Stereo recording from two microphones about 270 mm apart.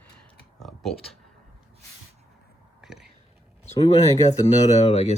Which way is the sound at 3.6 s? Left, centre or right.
Left.